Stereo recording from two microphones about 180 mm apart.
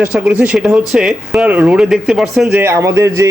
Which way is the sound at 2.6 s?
15° right (ahead or behind).